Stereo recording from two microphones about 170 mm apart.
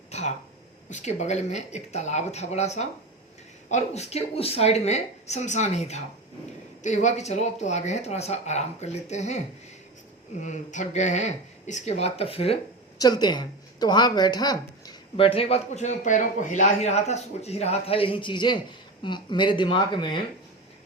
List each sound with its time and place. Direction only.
0.1 s a sound: 40° left (ahead or behind)
0.9 s speech: 45° left (ahead or behind)
10.4 s speech: 45° left (ahead or behind)
13.0 s speech: 25° left (ahead or behind)